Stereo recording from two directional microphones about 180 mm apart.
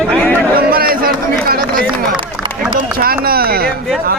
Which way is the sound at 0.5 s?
55° right (ahead or behind).